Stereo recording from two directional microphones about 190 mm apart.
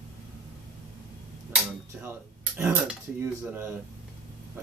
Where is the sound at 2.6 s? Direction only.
10° right (ahead or behind).